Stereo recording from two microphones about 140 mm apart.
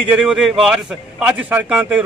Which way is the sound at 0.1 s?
5° right (ahead or behind).